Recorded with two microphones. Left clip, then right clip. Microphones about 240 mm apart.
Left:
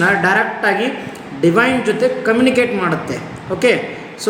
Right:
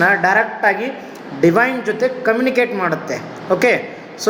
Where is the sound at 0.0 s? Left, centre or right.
Centre.